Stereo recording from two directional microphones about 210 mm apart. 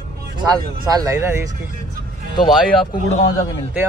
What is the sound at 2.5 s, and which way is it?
Speech, centre (ahead or behind).